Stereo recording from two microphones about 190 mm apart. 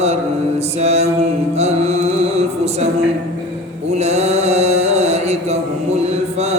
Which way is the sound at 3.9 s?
35° right (ahead or behind).